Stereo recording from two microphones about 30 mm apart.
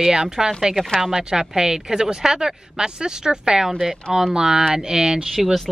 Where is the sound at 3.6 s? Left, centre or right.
Centre.